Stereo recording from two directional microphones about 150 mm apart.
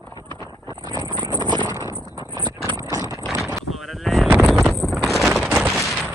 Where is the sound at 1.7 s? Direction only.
25° right (ahead or behind).